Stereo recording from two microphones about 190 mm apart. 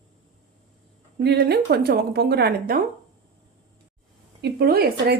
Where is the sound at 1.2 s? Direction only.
60° right (ahead or behind).